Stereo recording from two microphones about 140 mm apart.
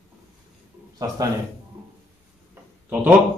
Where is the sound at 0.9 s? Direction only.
25° right (ahead or behind).